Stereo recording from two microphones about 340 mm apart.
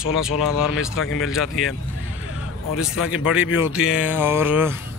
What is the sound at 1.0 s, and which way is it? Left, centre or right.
Speech, left.